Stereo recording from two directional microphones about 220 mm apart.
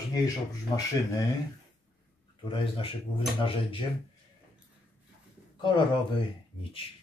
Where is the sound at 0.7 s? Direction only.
20° left (ahead or behind).